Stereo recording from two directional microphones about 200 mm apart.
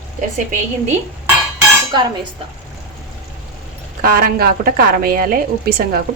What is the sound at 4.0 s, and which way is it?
A woman's voice, 45° right (ahead or behind).